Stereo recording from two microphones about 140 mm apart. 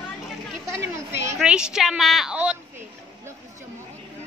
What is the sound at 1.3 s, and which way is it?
A woman's voice, 5° right (ahead or behind).